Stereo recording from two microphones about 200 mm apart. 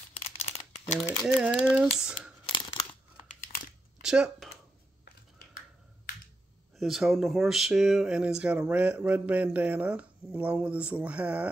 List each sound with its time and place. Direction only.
0.2 s a sound: 35° left (ahead or behind)
1.2 s speech: 5° right (ahead or behind)
2.5 s crunch: 25° left (ahead or behind)
4.0 s speech: 5° right (ahead or behind)
6.8 s speech: centre (ahead or behind)